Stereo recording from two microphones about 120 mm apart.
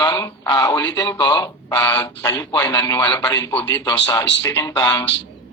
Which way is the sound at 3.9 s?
40° left (ahead or behind).